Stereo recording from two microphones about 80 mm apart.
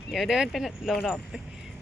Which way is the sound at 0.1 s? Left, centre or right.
Centre.